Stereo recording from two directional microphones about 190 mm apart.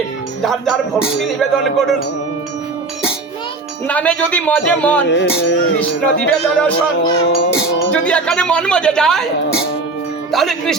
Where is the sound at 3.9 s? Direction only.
5° left (ahead or behind).